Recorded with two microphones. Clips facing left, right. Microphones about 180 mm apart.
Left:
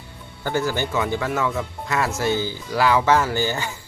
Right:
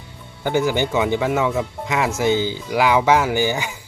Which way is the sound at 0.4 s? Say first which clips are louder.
Right 4 dB; 15° right (ahead or behind).